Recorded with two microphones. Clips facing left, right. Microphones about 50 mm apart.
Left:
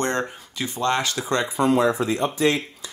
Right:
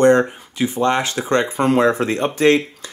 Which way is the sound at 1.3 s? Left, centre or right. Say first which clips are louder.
Right 5 dB; right.